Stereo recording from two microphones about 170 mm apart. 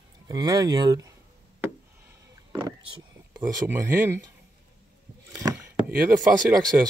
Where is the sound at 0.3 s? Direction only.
25° right (ahead or behind).